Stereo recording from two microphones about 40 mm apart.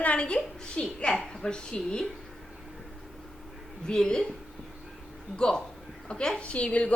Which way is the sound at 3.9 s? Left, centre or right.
Centre.